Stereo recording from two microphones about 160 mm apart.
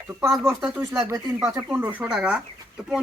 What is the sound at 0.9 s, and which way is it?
Speech, 20° right (ahead or behind).